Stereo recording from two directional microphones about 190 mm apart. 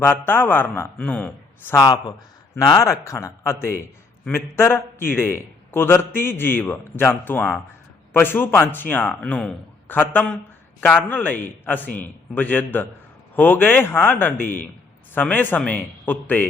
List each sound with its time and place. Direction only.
0.0 s a man's voice: 10° left (ahead or behind)
14.3 s a man's voice: 45° left (ahead or behind)
15.1 s a man's voice: 10° left (ahead or behind)